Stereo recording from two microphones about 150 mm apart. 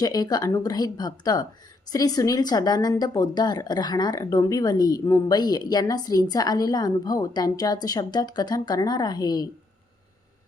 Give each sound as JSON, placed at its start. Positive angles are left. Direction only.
{"t": 0.0, "sound": "a woman's voice", "side_deg": 25}